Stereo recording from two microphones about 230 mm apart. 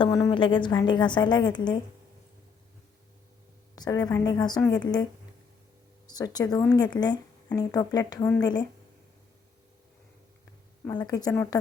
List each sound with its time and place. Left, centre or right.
0.0 s a woman's voice: centre
3.8 s speech: centre
6.1 s speech: centre
10.8 s speech: centre